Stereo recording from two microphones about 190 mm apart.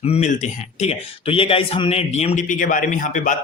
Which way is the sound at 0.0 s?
35° left (ahead or behind).